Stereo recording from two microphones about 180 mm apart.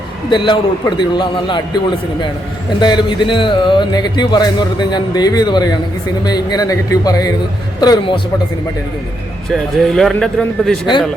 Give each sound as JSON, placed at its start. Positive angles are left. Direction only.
{"t": 0.3, "sound": "speech", "side_deg": 25}
{"t": 2.8, "sound": "speech", "side_deg": 25}
{"t": 9.5, "sound": "speech", "side_deg": 0}